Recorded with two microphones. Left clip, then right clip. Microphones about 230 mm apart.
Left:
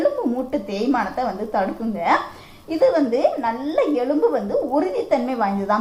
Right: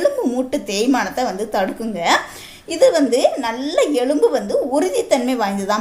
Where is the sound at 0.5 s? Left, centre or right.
Right.